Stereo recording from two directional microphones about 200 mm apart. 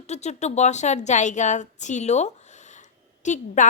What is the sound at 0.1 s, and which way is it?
A woman's voice, 35° left (ahead or behind).